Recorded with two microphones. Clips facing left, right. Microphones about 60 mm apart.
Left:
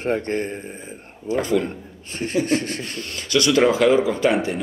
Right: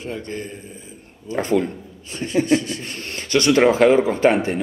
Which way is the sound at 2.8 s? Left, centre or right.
Right.